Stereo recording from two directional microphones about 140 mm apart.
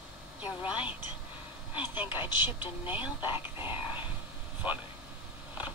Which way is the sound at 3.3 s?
35° left (ahead or behind).